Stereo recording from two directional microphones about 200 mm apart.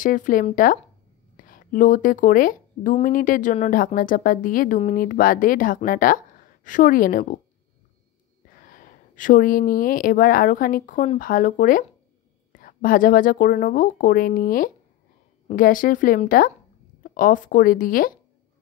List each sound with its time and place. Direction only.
0.0 s speech: 40° left (ahead or behind)
8.6 s speech: 40° left (ahead or behind)